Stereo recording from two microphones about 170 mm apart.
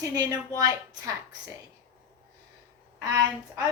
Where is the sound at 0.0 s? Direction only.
20° right (ahead or behind).